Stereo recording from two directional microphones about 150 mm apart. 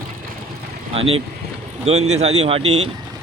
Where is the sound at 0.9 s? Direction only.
40° right (ahead or behind).